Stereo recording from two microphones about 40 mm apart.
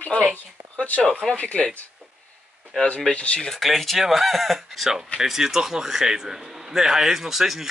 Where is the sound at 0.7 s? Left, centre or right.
Left.